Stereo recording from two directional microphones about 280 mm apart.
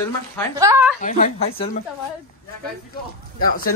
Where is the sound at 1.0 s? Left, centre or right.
Left.